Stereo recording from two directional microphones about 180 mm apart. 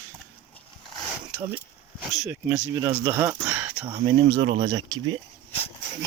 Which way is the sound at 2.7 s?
20° right (ahead or behind).